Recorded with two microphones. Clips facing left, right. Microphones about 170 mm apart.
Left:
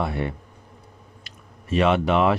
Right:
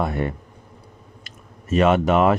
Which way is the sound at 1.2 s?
45° right (ahead or behind).